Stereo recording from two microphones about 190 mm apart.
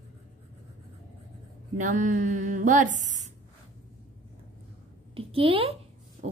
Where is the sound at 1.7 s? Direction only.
40° right (ahead or behind).